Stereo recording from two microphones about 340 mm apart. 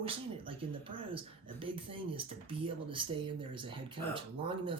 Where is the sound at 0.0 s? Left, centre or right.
Centre.